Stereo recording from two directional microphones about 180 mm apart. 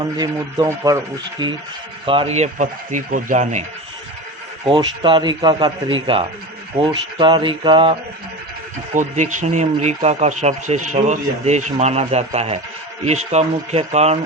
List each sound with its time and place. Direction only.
0.0 s speech: 20° right (ahead or behind); by 3.6 s 45° right (ahead or behind)
4.6 s speech: 25° right (ahead or behind)
8.9 s speech: 45° right (ahead or behind)